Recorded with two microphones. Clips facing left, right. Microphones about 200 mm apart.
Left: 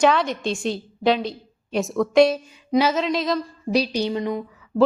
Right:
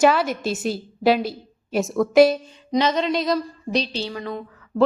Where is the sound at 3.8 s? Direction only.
15° left (ahead or behind).